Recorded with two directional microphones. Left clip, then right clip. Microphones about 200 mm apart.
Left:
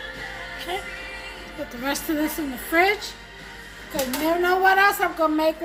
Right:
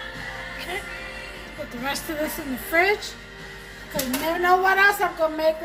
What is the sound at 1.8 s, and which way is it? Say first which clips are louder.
A woman's voice: left 2 dB; 45° left (ahead or behind).